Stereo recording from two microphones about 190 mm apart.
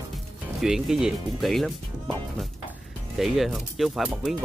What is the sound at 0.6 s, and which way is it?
Speech, centre (ahead or behind).